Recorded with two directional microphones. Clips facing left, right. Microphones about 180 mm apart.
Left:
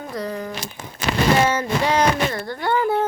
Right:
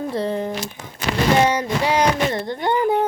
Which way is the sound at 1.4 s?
15° right (ahead or behind).